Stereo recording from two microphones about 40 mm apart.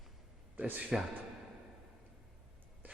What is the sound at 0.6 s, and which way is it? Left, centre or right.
Speech, right.